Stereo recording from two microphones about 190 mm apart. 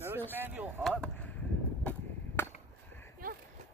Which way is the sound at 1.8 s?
10° left (ahead or behind).